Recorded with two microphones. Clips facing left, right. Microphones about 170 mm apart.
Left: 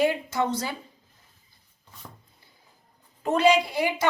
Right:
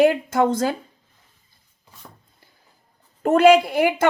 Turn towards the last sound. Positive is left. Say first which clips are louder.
# right 7 dB
turn(degrees=-50)  # may be behind; listen again after turning